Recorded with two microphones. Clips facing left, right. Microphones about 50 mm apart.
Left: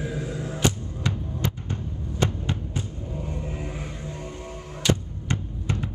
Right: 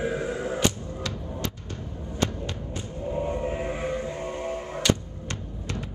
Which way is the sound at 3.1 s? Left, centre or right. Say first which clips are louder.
Right 6 dB; right.